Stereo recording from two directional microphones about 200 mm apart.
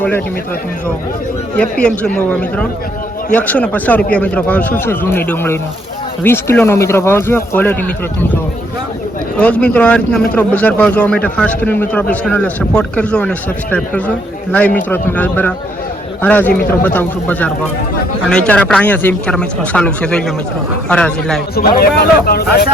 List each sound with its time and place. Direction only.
1.8 s speech: 5° left (ahead or behind)
9.4 s speech: 5° left (ahead or behind)
21.5 s a man's voice: 50° left (ahead or behind)